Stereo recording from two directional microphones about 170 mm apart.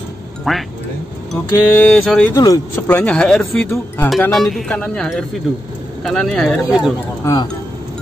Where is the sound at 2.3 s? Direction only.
20° left (ahead or behind).